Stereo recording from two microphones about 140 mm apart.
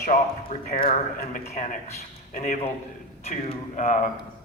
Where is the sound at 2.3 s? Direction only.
65° left (ahead or behind).